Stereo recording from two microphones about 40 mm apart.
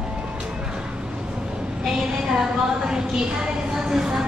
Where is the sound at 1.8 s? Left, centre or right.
Centre.